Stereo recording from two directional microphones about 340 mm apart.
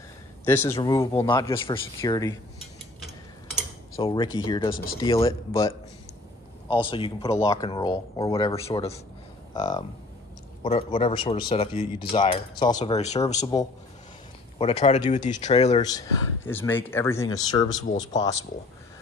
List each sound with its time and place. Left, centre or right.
0.5 s speech: centre
4.0 s speech: centre